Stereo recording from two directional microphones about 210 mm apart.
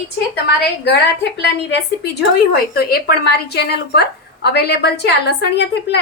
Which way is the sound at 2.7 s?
50° left (ahead or behind).